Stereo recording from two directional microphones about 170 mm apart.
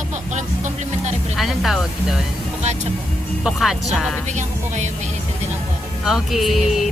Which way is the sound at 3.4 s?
Centre (ahead or behind).